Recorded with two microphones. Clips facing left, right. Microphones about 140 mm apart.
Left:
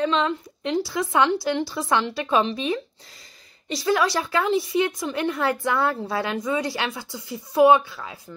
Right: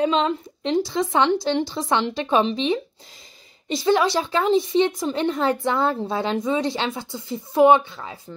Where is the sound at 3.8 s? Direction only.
25° right (ahead or behind).